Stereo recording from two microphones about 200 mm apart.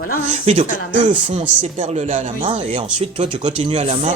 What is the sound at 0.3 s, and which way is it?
Speech, 35° right (ahead or behind).